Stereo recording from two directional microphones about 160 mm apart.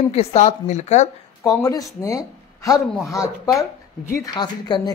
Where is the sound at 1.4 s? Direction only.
20° left (ahead or behind).